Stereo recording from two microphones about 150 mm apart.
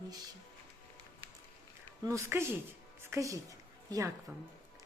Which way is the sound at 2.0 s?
20° right (ahead or behind).